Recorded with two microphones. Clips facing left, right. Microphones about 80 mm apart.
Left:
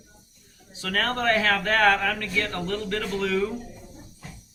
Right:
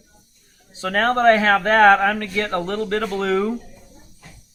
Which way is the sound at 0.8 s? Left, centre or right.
Right.